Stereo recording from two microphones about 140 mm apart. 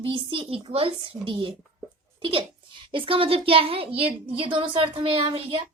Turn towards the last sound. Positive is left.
turn(degrees=-40)  # may be behind; listen again after turning